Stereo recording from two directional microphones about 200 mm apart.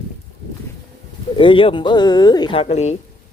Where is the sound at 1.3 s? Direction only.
25° left (ahead or behind).